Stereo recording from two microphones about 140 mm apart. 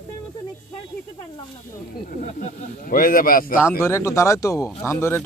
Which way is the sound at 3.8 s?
20° left (ahead or behind).